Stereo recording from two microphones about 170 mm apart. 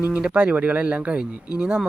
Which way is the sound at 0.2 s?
5° right (ahead or behind).